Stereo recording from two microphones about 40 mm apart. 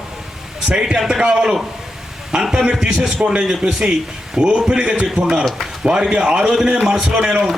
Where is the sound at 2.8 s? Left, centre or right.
Right.